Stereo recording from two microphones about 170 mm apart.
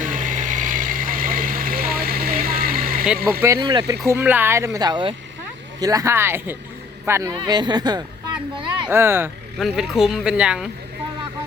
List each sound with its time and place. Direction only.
0.0 s vehicle: 50° right (ahead or behind)
3.6 s speech: 25° right (ahead or behind)
8.9 s speech: 15° right (ahead or behind)
9.6 s speech: centre (ahead or behind)